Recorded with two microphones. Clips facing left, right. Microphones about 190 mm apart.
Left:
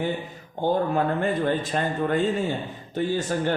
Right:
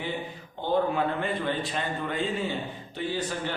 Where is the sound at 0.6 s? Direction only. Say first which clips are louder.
Left 3 dB; 45° left (ahead or behind).